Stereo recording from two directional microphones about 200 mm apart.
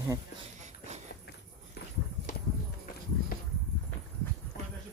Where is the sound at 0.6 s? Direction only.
35° right (ahead or behind).